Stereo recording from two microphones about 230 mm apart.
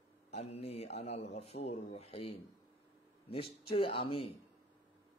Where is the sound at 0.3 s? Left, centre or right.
Left.